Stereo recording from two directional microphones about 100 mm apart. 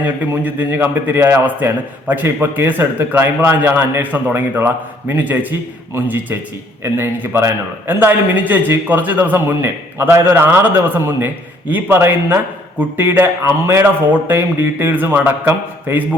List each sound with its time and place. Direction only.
0.3 s a man's voice: 20° right (ahead or behind)